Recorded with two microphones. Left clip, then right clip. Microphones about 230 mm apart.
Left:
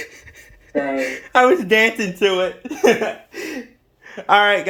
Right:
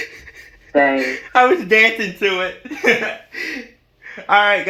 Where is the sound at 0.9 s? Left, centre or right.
Centre.